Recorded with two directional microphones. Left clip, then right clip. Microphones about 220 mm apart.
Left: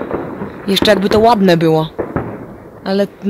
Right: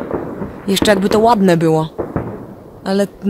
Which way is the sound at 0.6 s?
Centre (ahead or behind).